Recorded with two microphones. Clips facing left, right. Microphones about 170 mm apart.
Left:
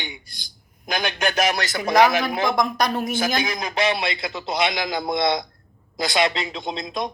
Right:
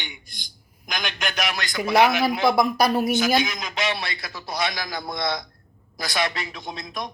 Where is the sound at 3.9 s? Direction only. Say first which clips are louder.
Left 6 dB; 20° left (ahead or behind).